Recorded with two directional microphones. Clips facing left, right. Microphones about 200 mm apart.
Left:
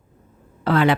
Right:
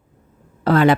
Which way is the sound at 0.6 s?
45° right (ahead or behind).